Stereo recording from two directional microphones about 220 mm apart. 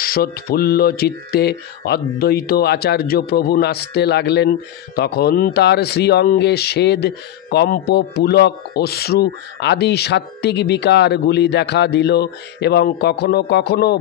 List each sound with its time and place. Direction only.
0.0 s speech: 40° left (ahead or behind)